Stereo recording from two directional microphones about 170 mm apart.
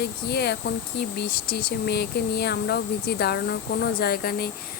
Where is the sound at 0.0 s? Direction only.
75° left (ahead or behind).